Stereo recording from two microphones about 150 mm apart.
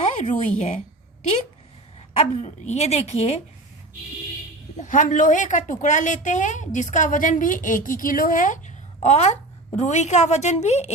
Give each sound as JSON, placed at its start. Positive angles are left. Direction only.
{"t": 0.0, "sound": "speech", "side_deg": 50}
{"t": 2.1, "sound": "a woman's voice", "side_deg": 45}
{"t": 4.8, "sound": "a woman's voice", "side_deg": 60}